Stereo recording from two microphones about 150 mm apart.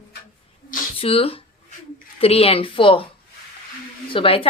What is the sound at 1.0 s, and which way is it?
Speech, 40° left (ahead or behind).